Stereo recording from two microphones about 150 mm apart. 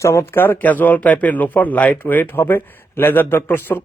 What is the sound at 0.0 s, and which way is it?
A man's voice, 20° left (ahead or behind).